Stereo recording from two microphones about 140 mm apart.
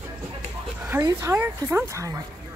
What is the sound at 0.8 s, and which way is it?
Speech, 15° right (ahead or behind).